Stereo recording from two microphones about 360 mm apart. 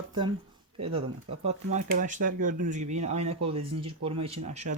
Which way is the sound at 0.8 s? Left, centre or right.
Centre.